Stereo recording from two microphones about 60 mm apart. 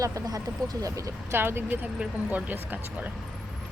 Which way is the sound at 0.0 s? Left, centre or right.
Right.